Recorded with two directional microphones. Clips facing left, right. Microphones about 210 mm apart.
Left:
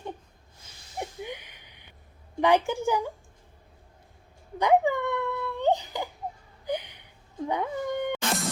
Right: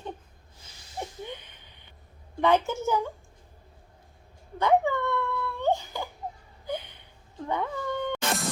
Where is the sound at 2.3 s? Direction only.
15° left (ahead or behind).